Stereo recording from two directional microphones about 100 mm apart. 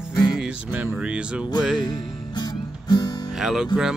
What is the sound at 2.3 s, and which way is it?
Music, 45° left (ahead or behind).